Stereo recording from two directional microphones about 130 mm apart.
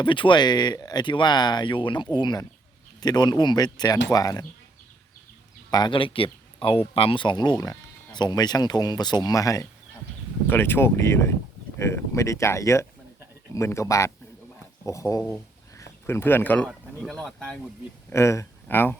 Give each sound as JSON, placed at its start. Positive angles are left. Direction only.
{"t": 0.0, "sound": "speech", "side_deg": 40}
{"t": 5.7, "sound": "speech", "side_deg": 35}
{"t": 10.4, "sound": "speech", "side_deg": 15}
{"t": 18.1, "sound": "speech", "side_deg": 20}